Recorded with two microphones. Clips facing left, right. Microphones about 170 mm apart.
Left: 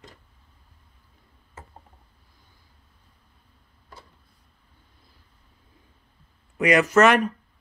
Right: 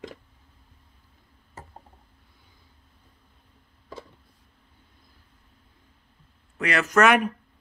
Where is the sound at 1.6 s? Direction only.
40° right (ahead or behind).